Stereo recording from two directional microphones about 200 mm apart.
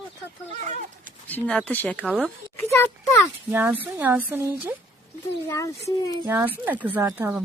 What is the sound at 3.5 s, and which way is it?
Speech, 10° right (ahead or behind).